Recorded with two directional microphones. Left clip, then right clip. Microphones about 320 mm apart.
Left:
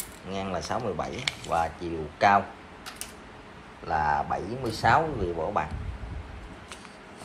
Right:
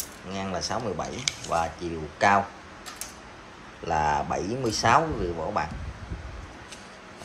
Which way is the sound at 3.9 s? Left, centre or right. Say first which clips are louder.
Right 1 dB; centre.